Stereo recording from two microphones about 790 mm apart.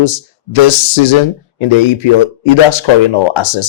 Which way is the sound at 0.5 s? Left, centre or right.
Left.